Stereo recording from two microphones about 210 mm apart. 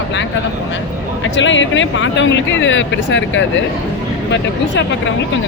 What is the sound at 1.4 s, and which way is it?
Speech, 60° left (ahead or behind).